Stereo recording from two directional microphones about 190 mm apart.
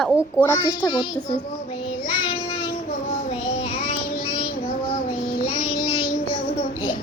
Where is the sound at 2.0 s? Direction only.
25° left (ahead or behind).